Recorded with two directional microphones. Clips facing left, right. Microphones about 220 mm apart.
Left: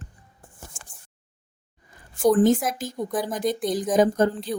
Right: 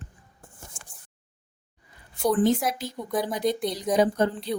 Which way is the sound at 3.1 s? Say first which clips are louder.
Right 2 dB; centre (ahead or behind).